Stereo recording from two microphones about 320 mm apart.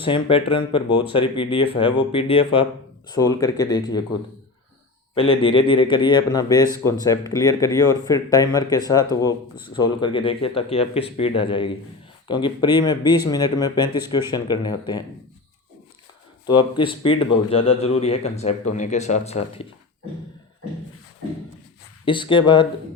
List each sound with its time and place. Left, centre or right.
0.0 s speech: centre
5.1 s speech: centre
16.5 s speech: centre
22.0 s speech: centre